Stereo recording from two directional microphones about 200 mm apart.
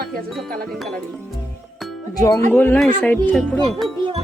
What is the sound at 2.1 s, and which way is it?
Speech, 15° left (ahead or behind).